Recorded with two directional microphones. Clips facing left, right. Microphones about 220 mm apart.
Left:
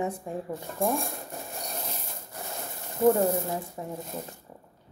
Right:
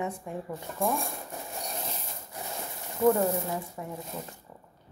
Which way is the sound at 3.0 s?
30° left (ahead or behind).